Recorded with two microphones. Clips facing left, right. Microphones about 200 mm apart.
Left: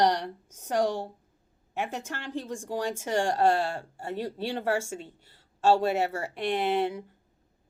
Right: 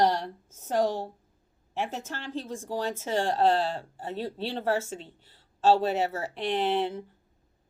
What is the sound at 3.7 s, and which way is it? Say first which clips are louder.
Speech: right 1 dB; 45° left (ahead or behind).